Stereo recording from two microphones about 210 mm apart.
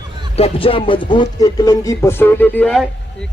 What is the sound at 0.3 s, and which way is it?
Speech, 25° left (ahead or behind).